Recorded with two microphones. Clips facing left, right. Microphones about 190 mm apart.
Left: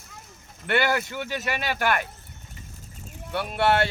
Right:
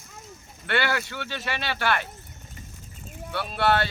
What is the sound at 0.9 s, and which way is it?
Speech, 10° left (ahead or behind).